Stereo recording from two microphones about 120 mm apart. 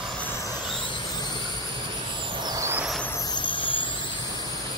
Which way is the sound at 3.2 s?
40° left (ahead or behind).